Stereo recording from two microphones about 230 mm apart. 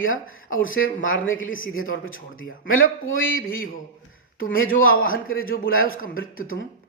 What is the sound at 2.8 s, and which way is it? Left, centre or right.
Speech, left.